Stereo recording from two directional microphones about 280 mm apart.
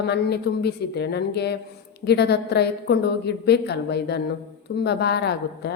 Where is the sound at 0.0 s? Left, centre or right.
Left.